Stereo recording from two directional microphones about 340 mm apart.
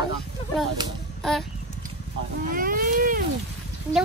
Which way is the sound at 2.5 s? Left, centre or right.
Right.